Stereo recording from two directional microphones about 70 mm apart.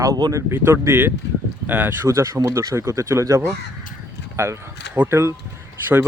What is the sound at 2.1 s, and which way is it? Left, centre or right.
Speech, right.